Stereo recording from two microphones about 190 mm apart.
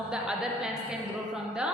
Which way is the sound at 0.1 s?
5° right (ahead or behind).